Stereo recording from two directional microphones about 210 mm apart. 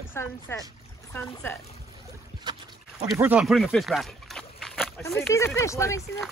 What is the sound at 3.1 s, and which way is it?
Speech, 10° right (ahead or behind).